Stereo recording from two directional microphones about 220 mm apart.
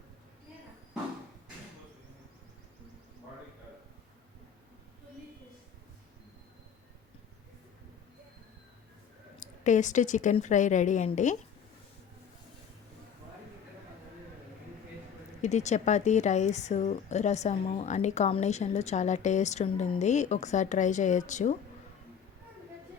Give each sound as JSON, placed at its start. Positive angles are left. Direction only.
{"t": 9.4, "sound": "a woman's voice", "side_deg": 35}
{"t": 15.4, "sound": "a woman's voice", "side_deg": 30}